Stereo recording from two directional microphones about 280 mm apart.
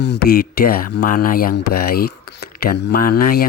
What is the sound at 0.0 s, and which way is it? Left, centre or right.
Speech, left.